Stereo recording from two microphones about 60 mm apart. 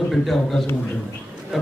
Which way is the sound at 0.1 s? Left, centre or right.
Centre.